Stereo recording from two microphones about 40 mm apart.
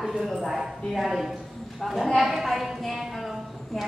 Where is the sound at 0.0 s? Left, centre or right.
Centre.